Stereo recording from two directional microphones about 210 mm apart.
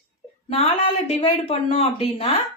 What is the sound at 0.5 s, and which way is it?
Speech, 30° left (ahead or behind).